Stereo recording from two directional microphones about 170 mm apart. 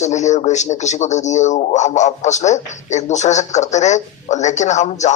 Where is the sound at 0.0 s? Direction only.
45° left (ahead or behind).